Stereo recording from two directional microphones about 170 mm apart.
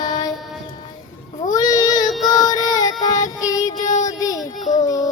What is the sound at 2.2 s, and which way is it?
Child singing, 20° left (ahead or behind).